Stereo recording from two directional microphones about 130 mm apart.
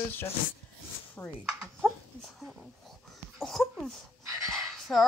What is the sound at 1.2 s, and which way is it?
Speech, 15° left (ahead or behind).